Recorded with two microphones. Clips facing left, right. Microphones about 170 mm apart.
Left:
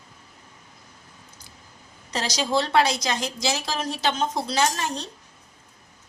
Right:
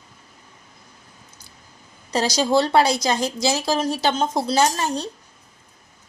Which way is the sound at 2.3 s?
35° right (ahead or behind).